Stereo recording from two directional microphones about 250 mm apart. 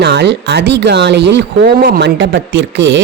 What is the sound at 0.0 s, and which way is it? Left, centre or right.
Speech, right.